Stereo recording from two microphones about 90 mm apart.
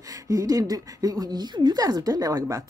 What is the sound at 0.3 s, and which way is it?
A woman's voice, 40° right (ahead or behind).